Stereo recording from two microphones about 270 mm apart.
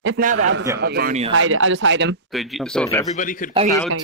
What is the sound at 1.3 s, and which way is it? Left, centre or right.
Speech, right.